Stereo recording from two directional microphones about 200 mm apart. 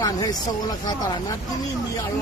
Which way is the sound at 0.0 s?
20° left (ahead or behind).